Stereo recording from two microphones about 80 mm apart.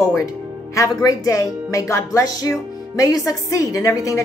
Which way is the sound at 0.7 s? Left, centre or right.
Left.